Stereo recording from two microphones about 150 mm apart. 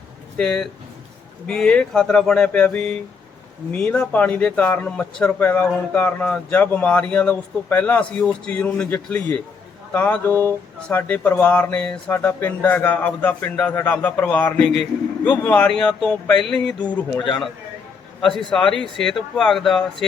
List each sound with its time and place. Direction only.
0.3 s speech: 5° left (ahead or behind)